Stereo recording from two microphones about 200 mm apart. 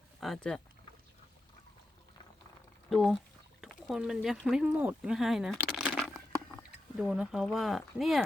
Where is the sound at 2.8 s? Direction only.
Centre (ahead or behind).